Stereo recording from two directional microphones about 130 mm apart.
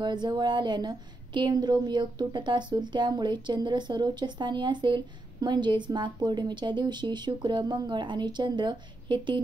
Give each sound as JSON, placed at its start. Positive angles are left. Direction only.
{"t": 0.0, "sound": "a woman's voice", "side_deg": -35}